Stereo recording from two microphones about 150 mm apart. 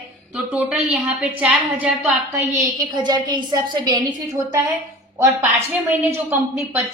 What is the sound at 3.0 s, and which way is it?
A woman's voice, 30° right (ahead or behind).